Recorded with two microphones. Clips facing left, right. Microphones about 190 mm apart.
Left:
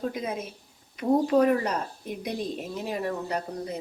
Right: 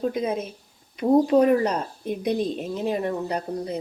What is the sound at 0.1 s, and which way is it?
Speech, 25° right (ahead or behind).